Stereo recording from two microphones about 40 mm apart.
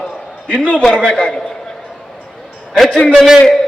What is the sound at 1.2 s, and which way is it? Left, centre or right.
Speech, centre.